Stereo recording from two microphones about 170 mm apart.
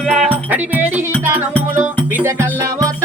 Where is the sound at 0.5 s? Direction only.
10° right (ahead or behind).